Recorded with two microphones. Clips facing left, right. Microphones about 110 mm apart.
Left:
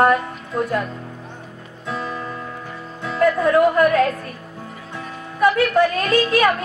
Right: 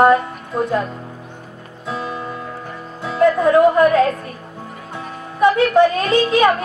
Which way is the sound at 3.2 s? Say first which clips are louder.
Right 3 dB; 25° right (ahead or behind).